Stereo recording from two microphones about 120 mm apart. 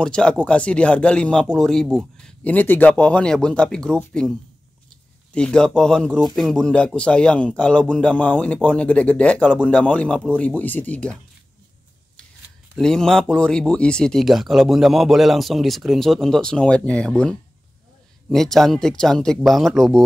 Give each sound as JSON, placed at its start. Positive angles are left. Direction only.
{"t": 0.0, "sound": "speech", "side_deg": 5}
{"t": 12.7, "sound": "speech", "side_deg": 5}